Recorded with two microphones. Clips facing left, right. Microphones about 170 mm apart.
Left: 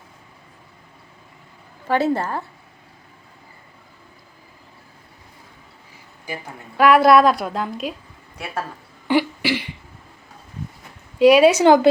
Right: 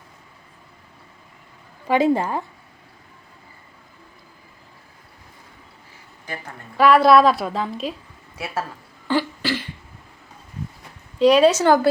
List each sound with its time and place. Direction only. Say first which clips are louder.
1.9 s a woman's voice: right 2 dB; 15° right (ahead or behind)
6.2 s a woman's voice: left 2 dB; 5° left (ahead or behind)
9.0 s cough: left 3 dB; 15° left (ahead or behind)
11.2 s a woman's voice: left 2 dB; 10° left (ahead or behind)